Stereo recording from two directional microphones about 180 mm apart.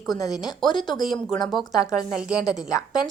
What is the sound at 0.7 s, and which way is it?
Speech, 25° left (ahead or behind).